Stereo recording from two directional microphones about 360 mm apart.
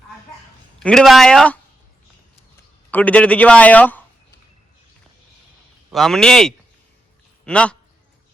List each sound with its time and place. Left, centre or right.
0.8 s a man's voice: centre
2.9 s a man's voice: centre
5.9 s a man's voice: centre